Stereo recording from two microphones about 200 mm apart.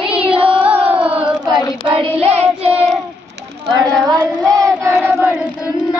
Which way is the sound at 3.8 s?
Centre (ahead or behind).